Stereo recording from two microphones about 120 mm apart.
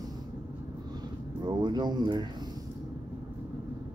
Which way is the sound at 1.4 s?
35° right (ahead or behind).